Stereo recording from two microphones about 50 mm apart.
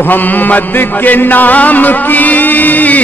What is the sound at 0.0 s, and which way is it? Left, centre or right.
Chant, left.